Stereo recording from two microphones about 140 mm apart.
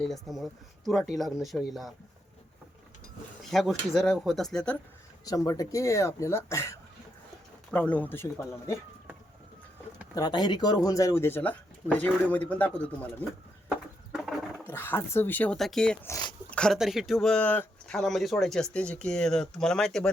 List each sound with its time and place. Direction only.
0.0 s speech: centre (ahead or behind)
3.5 s speech: centre (ahead or behind)
5.2 s speech: 25° left (ahead or behind)
7.7 s speech: 10° left (ahead or behind)
10.2 s speech: 30° left (ahead or behind); by 13.1 s 10° left (ahead or behind)
14.7 s speech: 15° left (ahead or behind)
15.5 s speech: centre (ahead or behind)
16.0 s speech: 25° left (ahead or behind)
16.5 s a sound: 5° left (ahead or behind)
16.7 s speech: 5° right (ahead or behind)